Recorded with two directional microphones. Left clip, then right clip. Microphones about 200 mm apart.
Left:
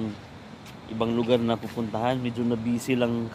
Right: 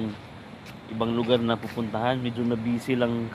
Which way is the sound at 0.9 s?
10° left (ahead or behind).